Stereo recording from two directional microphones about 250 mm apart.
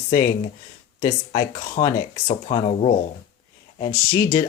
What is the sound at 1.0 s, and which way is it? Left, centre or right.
Speech, centre.